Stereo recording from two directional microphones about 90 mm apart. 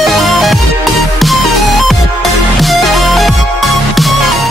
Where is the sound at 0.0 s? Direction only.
Centre (ahead or behind).